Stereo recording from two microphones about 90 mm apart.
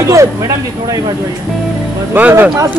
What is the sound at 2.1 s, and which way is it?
Speech, 25° right (ahead or behind).